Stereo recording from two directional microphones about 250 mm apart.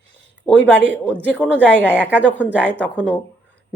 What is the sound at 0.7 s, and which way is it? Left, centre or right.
Speech, right.